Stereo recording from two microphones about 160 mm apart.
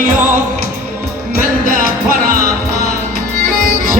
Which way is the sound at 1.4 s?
60° right (ahead or behind).